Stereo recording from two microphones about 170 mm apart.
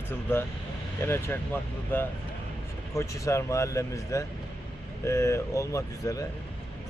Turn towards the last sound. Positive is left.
turn(degrees=20)  # may be behind; listen again after turning